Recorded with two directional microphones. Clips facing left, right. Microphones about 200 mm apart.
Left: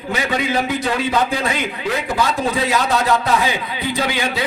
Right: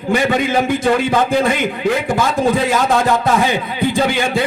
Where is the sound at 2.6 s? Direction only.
50° right (ahead or behind).